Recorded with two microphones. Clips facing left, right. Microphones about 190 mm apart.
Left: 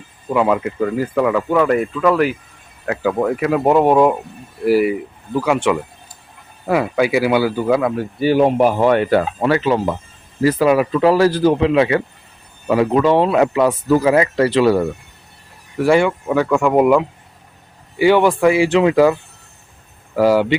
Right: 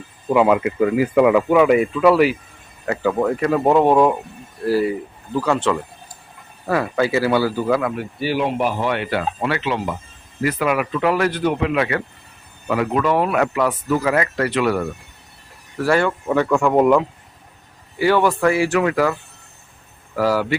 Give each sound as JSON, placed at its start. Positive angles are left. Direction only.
{"t": 0.4, "sound": "speech", "side_deg": -5}
{"t": 8.2, "sound": "speech", "side_deg": 45}
{"t": 15.8, "sound": "speech", "side_deg": 15}
{"t": 18.0, "sound": "speech", "side_deg": 20}
{"t": 20.1, "sound": "speech", "side_deg": 20}